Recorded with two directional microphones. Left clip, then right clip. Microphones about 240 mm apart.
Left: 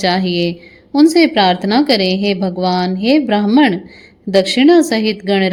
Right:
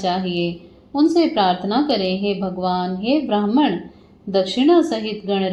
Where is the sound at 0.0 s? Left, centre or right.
Left.